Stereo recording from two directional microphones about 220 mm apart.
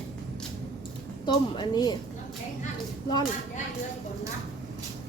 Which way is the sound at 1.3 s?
20° left (ahead or behind).